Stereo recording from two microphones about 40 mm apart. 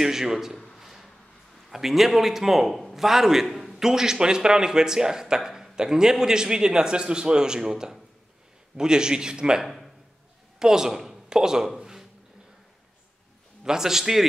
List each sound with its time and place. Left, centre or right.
0.0 s a man's voice: centre
0.7 s a sound: centre
1.7 s a man's voice: centre
10.6 s speech: centre
11.8 s a sound: centre
13.7 s a man's voice: centre